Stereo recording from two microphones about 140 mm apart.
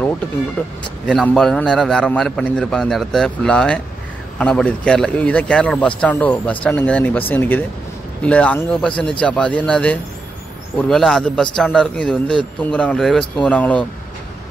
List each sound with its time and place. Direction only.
1.0 s a man's voice: 5° left (ahead or behind)